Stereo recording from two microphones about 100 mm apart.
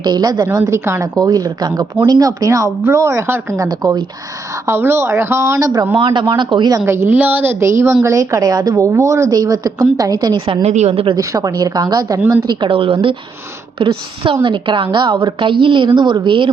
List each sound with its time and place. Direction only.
0.0 s speech: 45° right (ahead or behind)
0.7 s a woman's voice: 30° right (ahead or behind)
5.9 s speech: 50° right (ahead or behind)
6.8 s a woman's voice: 25° right (ahead or behind); by 10.4 s 45° right (ahead or behind)
10.4 s a woman's voice: 80° right
11.2 s a woman's voice: 35° right (ahead or behind)
12.5 s a woman's voice: 60° right (ahead or behind)